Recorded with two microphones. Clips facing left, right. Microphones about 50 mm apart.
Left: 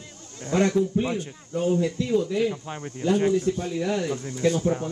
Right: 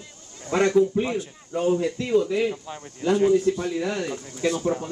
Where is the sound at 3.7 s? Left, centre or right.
Right.